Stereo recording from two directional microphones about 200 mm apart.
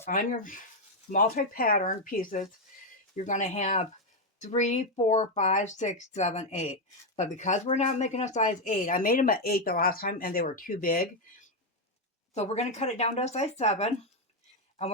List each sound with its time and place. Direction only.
0.0 s speech: 45° left (ahead or behind)
12.3 s speech: 35° left (ahead or behind)